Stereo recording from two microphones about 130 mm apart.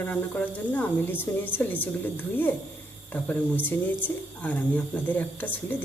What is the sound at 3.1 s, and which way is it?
Speech, 15° left (ahead or behind).